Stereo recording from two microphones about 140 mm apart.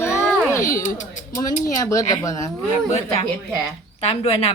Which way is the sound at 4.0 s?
45° left (ahead or behind).